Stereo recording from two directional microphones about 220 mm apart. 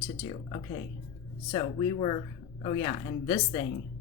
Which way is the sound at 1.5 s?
20° left (ahead or behind).